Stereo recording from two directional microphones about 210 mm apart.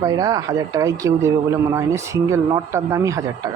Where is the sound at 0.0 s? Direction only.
15° right (ahead or behind).